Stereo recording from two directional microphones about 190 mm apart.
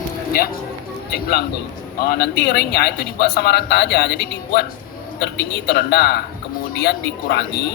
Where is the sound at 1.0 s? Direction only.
55° left (ahead or behind).